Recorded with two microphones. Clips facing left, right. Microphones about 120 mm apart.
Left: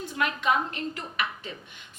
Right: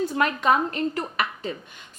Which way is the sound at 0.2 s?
40° right (ahead or behind).